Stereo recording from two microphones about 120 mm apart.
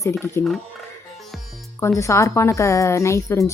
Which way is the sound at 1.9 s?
25° left (ahead or behind).